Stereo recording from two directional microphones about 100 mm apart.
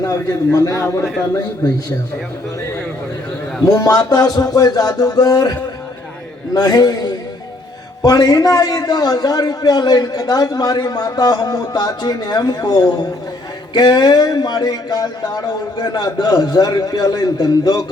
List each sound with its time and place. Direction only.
0.0 s a man's voice: 35° left (ahead or behind)
3.7 s a man's voice: 40° left (ahead or behind)